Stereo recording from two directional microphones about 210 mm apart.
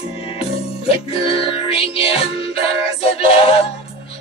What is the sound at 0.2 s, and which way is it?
Music, 25° left (ahead or behind).